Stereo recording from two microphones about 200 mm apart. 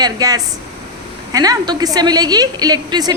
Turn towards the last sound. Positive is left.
turn(degrees=-20)  # may be behind; listen again after turning